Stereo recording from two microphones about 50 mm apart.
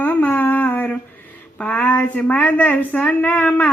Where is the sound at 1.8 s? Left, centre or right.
Left.